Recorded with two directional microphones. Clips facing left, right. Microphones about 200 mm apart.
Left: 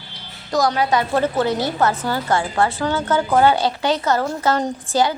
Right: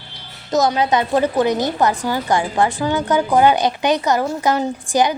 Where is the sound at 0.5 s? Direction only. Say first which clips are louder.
Right 2 dB; 20° right (ahead or behind).